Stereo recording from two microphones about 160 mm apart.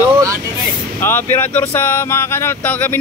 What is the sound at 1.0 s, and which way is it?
Speech, 15° left (ahead or behind).